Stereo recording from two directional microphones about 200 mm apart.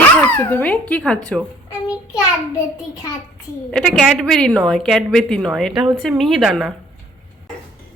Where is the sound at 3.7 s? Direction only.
5° left (ahead or behind).